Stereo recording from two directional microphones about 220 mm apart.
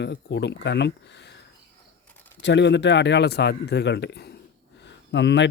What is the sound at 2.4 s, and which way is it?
A man's voice, 55° left (ahead or behind).